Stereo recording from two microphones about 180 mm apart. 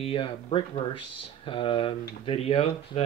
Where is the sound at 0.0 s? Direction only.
30° left (ahead or behind).